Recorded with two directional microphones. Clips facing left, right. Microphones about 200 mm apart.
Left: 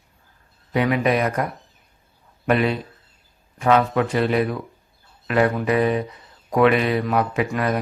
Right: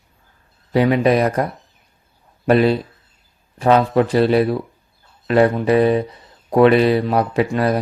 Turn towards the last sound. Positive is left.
turn(degrees=-35)  # may be behind; listen again after turning